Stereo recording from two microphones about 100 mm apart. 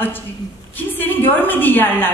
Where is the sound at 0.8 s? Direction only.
20° left (ahead or behind).